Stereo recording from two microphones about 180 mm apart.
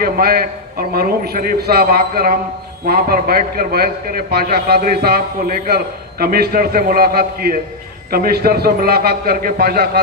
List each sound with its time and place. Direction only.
0.0 s a man's voice: 55° right (ahead or behind)